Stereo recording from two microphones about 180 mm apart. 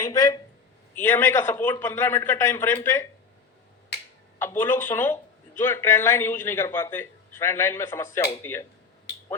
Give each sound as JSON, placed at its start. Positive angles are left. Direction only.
{"t": 0.1, "sound": "speech", "side_deg": 20}
{"t": 4.4, "sound": "speech", "side_deg": 10}